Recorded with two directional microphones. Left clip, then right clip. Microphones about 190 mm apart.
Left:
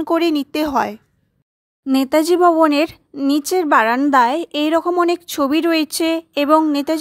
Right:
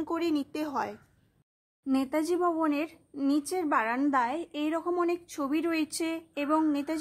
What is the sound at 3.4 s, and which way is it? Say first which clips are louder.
A woman's voice: left 16 dB; 45° left (ahead or behind).